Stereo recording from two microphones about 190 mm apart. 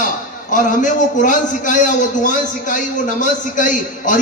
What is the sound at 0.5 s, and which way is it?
A man's voice, 45° left (ahead or behind).